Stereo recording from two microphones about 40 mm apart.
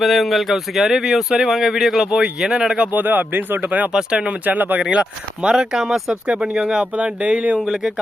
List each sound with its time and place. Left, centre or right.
0.0 s speech: centre
2.0 s speech: right
2.9 s speech: right
3.7 s speech: right
3.9 s speech: right
4.4 s speech: right
4.8 s speech: right
5.5 s speech: centre
6.9 s speech: right
7.6 s speech: centre